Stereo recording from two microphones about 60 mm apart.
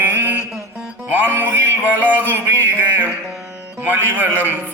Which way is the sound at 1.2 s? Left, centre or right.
Right.